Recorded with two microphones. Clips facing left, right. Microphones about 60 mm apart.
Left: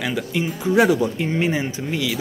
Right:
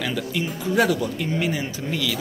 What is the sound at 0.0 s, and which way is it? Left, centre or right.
A man's voice, centre.